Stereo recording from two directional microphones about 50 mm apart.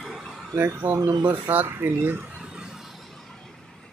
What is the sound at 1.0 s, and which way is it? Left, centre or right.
Speech, right.